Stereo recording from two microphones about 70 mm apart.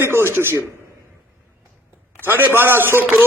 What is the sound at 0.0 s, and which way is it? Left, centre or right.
Speech, right.